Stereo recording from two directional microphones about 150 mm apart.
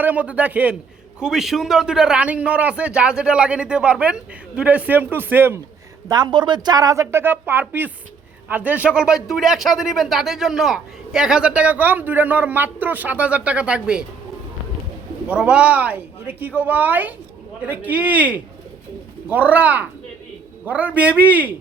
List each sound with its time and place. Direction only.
0.0 s a man's voice: 10° right (ahead or behind)
6.1 s a man's voice: 30° right (ahead or behind); by 14.0 s 5° right (ahead or behind)
15.3 s a man's voice: 10° right (ahead or behind)